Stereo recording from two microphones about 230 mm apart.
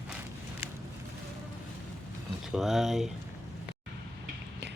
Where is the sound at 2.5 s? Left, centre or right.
Centre.